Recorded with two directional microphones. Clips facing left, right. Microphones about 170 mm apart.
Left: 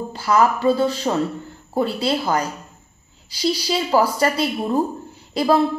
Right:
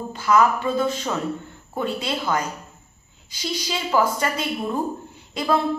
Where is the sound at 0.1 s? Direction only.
35° left (ahead or behind).